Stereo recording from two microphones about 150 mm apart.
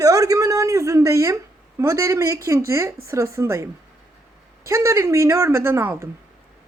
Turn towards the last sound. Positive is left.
turn(degrees=-15)  # may be behind; listen again after turning